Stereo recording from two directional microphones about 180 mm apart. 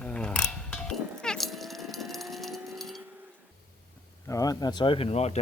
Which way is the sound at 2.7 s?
Centre (ahead or behind).